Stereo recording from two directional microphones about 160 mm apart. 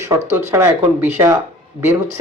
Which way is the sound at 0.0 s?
15° right (ahead or behind).